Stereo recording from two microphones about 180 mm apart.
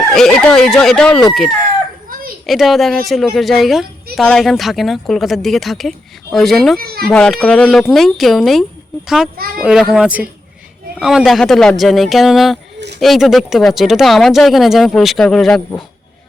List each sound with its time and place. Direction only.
0.1 s speech: centre (ahead or behind)
2.5 s speech: centre (ahead or behind)
6.7 s a child's voice: 55° right (ahead or behind)
7.0 s speech: 5° left (ahead or behind)